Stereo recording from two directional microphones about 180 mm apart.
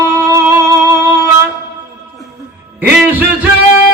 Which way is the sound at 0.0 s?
15° right (ahead or behind).